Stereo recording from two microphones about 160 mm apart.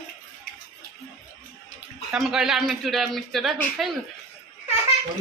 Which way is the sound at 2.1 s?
5° right (ahead or behind).